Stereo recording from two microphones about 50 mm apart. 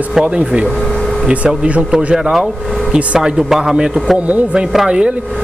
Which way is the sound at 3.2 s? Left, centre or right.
Centre.